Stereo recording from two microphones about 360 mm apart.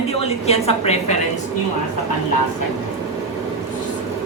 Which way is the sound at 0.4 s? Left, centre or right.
Centre.